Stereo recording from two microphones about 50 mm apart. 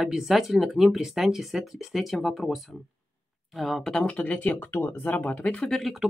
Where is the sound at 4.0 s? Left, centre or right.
Left.